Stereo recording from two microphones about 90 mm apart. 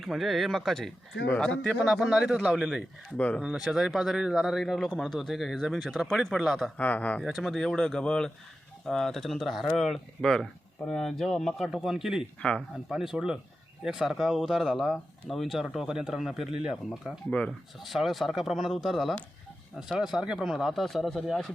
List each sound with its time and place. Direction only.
0.0 s speech: centre (ahead or behind)
1.9 s speech: 5° right (ahead or behind)
3.2 s speech: 15° left (ahead or behind)
3.4 s speech: 5° right (ahead or behind)
6.7 s speech: 15° left (ahead or behind)
7.3 s speech: 5° right (ahead or behind)
12.4 s speech: 10° left (ahead or behind)
12.9 s speech: 5° right (ahead or behind)